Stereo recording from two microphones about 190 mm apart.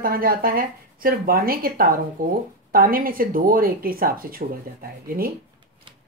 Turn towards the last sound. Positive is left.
turn(degrees=-50)  # may be behind; listen again after turning